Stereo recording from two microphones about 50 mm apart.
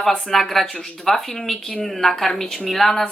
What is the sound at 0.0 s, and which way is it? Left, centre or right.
Speech, centre.